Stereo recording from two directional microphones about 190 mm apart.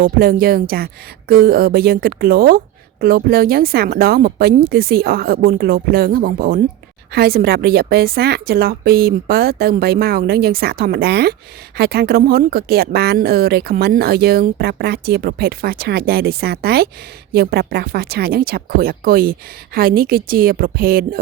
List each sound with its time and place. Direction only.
0.0 s a woman's voice: 50° right (ahead or behind)